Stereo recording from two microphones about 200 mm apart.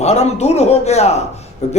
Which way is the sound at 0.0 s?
35° left (ahead or behind).